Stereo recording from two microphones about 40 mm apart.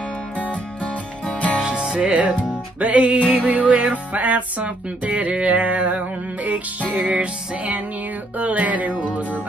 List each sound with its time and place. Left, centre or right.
0.4 s music: left
1.6 s music: right
8.4 s music: right